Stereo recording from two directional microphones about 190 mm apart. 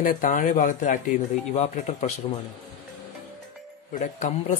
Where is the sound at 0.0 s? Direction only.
45° left (ahead or behind).